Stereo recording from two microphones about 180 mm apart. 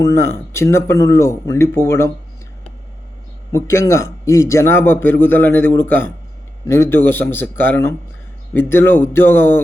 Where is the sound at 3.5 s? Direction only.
15° left (ahead or behind).